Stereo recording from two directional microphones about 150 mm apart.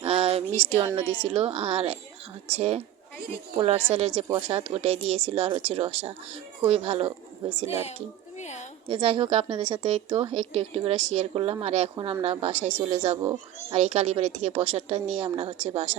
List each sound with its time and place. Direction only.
0.0 s a sound: 40° right (ahead or behind)
1.2 s a woman's voice: 40° right (ahead or behind)
7.7 s a child's voice: 45° left (ahead or behind)
8.9 s a woman's voice: 35° right (ahead or behind)
10.1 s a woman's voice: 40° right (ahead or behind)